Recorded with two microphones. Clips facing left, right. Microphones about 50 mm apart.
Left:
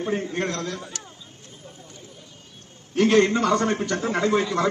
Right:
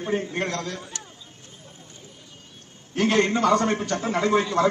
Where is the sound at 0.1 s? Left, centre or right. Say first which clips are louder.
Right 2 dB; right.